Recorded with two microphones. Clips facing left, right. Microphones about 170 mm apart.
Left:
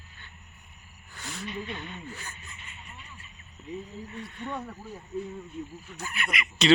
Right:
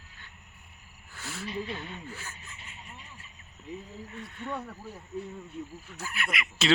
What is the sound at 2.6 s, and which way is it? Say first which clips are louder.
Vehicle: right 2 dB; 35° right (ahead or behind).